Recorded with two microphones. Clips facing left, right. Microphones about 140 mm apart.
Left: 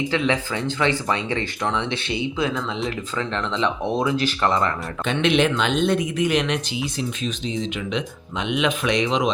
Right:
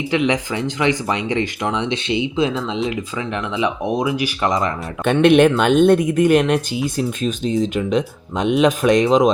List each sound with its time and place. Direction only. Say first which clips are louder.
0.1 s speech: right 4 dB; 15° right (ahead or behind)
5.0 s speech: right 8 dB; 55° right (ahead or behind)